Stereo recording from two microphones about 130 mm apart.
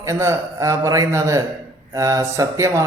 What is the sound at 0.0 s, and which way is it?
A man's voice, 20° right (ahead or behind).